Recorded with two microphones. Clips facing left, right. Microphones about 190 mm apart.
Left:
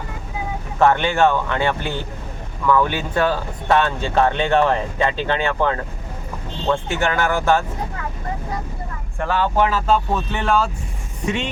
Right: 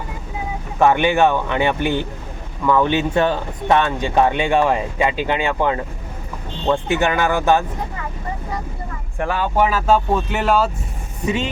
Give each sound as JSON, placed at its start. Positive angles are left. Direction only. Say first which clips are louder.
{"t": 0.8, "sound": "speech", "louder": "right 1 dB", "side_deg": -15}
{"t": 9.1, "sound": "speech", "louder": "even", "side_deg": -15}